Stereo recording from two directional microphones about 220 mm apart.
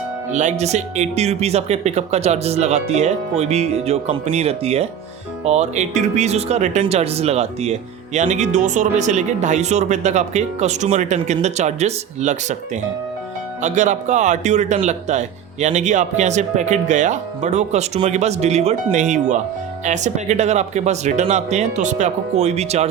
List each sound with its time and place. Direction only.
0.3 s speech: 35° right (ahead or behind)